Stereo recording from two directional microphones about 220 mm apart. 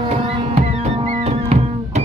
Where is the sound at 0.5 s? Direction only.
30° right (ahead or behind).